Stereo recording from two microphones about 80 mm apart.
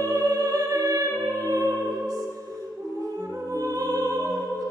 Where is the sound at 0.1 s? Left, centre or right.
Right.